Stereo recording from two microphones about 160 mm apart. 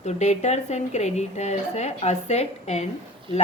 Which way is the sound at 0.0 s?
45° left (ahead or behind).